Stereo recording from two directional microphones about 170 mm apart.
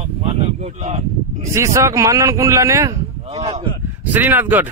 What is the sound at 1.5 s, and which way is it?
A man's voice, 15° right (ahead or behind).